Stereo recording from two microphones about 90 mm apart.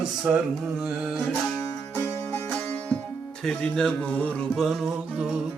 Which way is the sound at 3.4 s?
5° left (ahead or behind).